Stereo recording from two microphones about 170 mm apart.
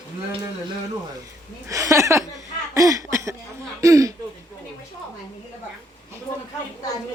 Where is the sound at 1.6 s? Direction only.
20° right (ahead or behind).